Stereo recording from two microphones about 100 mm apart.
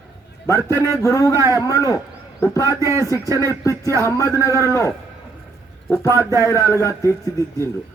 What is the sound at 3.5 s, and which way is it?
Music, 30° left (ahead or behind).